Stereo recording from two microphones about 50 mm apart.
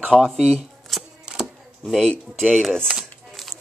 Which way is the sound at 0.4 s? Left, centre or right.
Centre.